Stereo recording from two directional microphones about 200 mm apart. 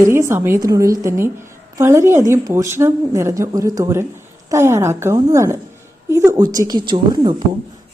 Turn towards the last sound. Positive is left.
turn(degrees=-20)  # may be behind; listen again after turning